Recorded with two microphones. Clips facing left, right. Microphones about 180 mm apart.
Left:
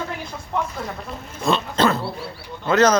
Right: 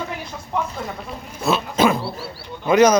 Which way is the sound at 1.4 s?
5° right (ahead or behind).